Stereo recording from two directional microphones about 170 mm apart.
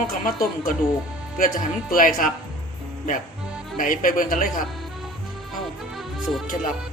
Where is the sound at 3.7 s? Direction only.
50° left (ahead or behind).